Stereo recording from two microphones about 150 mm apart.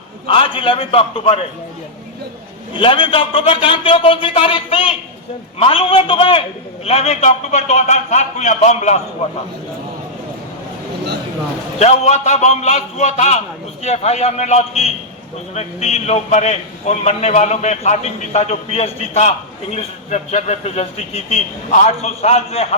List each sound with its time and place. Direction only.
0.3 s a man's voice: 35° left (ahead or behind)
2.7 s a man's voice: 35° left (ahead or behind); by 9.0 s 50° left (ahead or behind)
11.8 s a man's voice: 45° left (ahead or behind)